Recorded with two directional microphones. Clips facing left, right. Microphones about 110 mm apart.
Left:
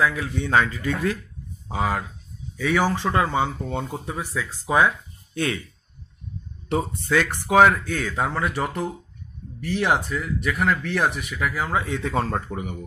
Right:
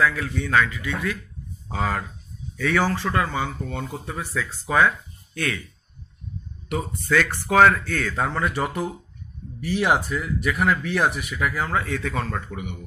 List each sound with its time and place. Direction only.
0.0 s a man's voice: 20° left (ahead or behind)
0.7 s speech: 40° left (ahead or behind)
1.7 s speech: 15° left (ahead or behind)
6.7 s speech: 25° left (ahead or behind); by 11.7 s centre (ahead or behind)
11.7 s speech: 20° left (ahead or behind); by 12.7 s 35° left (ahead or behind)